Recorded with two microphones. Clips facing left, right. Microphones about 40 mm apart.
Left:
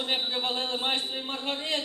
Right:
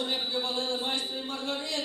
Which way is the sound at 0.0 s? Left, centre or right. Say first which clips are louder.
Left 2 dB; left.